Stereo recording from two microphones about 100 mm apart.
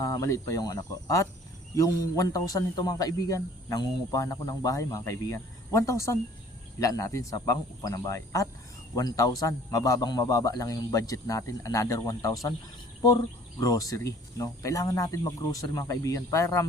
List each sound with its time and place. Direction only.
0.0 s speech: 30° left (ahead or behind)
13.6 s speech: 35° left (ahead or behind)